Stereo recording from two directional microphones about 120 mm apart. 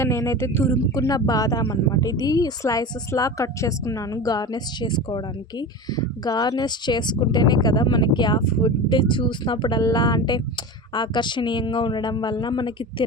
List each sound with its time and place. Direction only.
0.0 s speech: 20° left (ahead or behind); by 13.1 s 40° left (ahead or behind)